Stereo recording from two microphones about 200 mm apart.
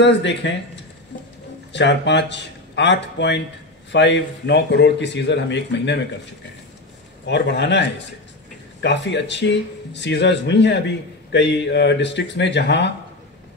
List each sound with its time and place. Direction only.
0.0 s speech: 60° left (ahead or behind)
1.7 s speech: 60° left (ahead or behind)
7.2 s speech: 60° left (ahead or behind)
8.8 s speech: 60° left (ahead or behind)